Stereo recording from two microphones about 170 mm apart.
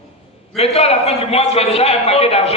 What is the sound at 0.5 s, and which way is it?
A man's voice, 35° left (ahead or behind).